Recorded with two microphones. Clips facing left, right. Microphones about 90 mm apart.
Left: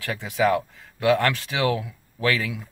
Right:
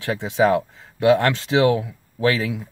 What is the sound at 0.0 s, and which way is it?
Speech, 25° right (ahead or behind).